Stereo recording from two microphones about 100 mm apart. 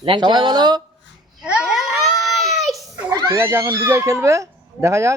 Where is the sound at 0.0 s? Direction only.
55° right (ahead or behind).